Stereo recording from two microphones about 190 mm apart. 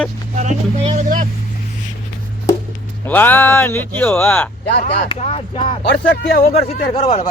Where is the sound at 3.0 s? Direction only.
10° left (ahead or behind).